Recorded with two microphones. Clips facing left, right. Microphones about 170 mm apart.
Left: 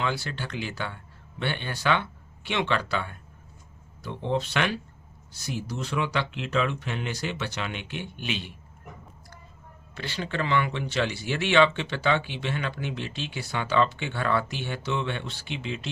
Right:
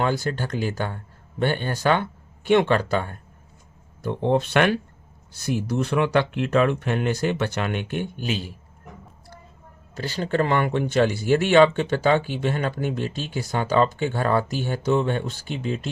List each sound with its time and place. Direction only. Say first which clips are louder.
0.0 s speech: right 6 dB; 45° right (ahead or behind)
9.9 s speech: right 7 dB; 40° right (ahead or behind)